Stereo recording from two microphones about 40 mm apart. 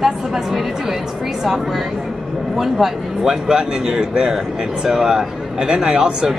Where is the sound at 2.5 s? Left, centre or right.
Centre.